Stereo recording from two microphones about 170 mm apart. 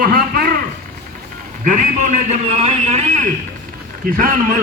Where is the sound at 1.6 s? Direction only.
45° right (ahead or behind).